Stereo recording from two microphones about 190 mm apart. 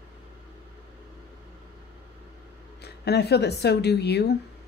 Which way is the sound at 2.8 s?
60° left (ahead or behind).